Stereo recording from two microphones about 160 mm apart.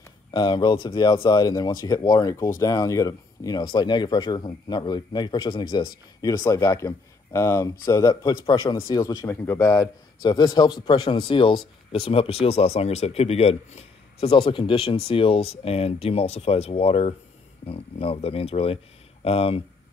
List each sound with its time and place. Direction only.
0.3 s speech: 25° left (ahead or behind)